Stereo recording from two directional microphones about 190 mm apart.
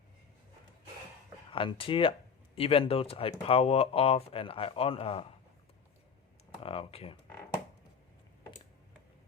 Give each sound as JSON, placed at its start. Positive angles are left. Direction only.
{"t": 1.5, "sound": "speech", "side_deg": 30}
{"t": 6.6, "sound": "speech", "side_deg": 30}